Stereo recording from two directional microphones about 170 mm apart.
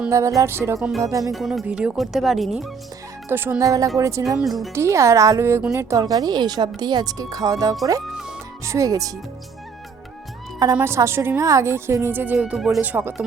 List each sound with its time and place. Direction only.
0.1 s a woman's voice: 20° right (ahead or behind)
1.3 s speech: centre (ahead or behind)
3.2 s a woman's voice: 10° right (ahead or behind)
4.4 s speech: centre (ahead or behind)
4.7 s a woman's voice: 15° right (ahead or behind)
10.8 s a woman's voice: 15° right (ahead or behind)